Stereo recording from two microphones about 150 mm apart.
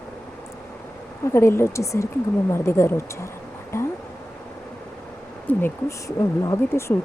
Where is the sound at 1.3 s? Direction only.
15° left (ahead or behind).